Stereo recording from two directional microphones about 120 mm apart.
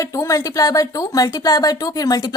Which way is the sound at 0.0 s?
25° left (ahead or behind).